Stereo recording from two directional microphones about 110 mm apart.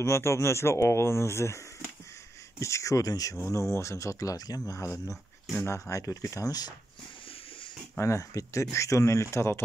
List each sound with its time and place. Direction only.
0.0 s speech: 25° left (ahead or behind)
2.6 s speech: 30° left (ahead or behind)
8.0 s speech: 25° left (ahead or behind)